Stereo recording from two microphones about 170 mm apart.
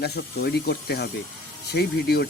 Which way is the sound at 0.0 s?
70° left (ahead or behind).